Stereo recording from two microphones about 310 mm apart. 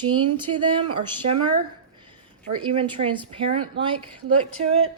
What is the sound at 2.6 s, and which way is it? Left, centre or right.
Speech, centre.